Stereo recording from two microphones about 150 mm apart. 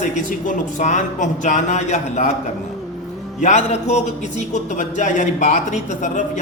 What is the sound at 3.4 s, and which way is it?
A man's voice, 50° left (ahead or behind).